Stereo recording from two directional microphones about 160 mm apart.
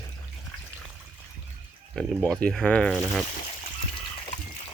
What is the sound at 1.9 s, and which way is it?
Speech, centre (ahead or behind).